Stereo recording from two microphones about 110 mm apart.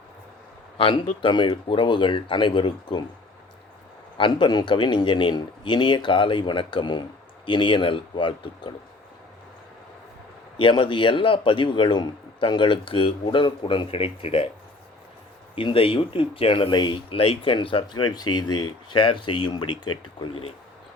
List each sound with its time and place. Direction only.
0.8 s speech: 55° left (ahead or behind)
4.2 s speech: 45° left (ahead or behind)
10.6 s speech: 45° left (ahead or behind)
15.5 s speech: 55° left (ahead or behind)